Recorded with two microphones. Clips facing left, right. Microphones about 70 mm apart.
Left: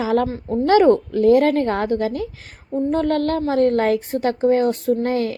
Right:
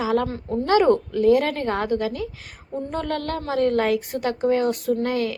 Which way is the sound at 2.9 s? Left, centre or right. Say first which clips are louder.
Left 7 dB; left.